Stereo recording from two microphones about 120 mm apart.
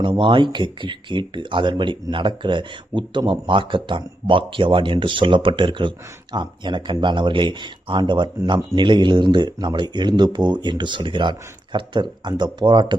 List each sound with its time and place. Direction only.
0.0 s speech: 45° right (ahead or behind)